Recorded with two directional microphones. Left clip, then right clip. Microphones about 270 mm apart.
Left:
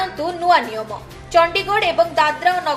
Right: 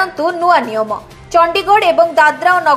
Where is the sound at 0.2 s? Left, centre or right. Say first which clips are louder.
Right 3 dB; centre.